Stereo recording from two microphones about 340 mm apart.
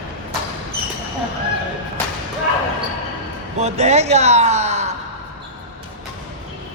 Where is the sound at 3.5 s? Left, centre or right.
Centre.